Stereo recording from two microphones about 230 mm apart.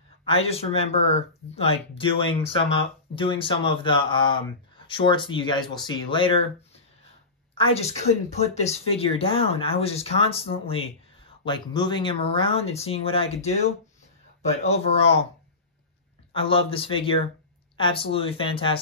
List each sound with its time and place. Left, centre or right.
0.3 s speech: left
7.5 s speech: left
16.3 s speech: left